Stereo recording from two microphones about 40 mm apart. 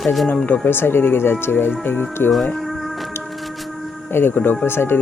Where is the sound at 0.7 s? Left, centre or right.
Left.